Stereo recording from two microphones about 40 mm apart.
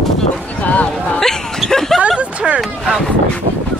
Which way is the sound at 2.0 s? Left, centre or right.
Right.